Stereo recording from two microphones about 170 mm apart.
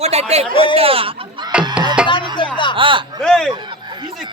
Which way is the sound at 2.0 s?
5° right (ahead or behind).